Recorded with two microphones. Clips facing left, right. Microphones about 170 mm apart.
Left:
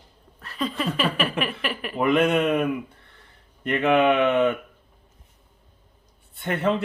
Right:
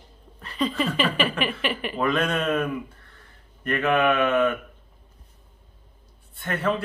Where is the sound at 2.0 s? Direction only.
20° left (ahead or behind).